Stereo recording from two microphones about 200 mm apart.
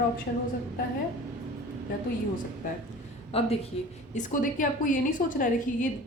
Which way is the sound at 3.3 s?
30° left (ahead or behind).